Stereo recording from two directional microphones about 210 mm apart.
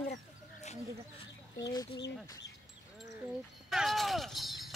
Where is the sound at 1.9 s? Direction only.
55° left (ahead or behind).